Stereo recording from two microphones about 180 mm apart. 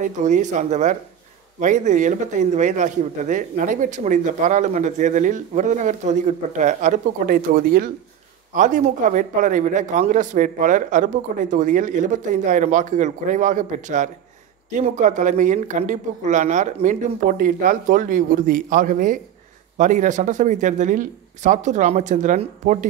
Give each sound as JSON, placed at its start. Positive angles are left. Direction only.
{"t": 0.0, "sound": "speech", "side_deg": -40}